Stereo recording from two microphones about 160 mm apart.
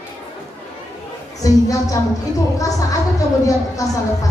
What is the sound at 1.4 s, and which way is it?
A woman's voice, 20° left (ahead or behind).